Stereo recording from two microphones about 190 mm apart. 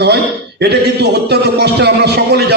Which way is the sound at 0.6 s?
60° right (ahead or behind).